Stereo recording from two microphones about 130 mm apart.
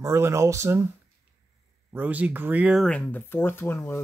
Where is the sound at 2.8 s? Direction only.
10° left (ahead or behind).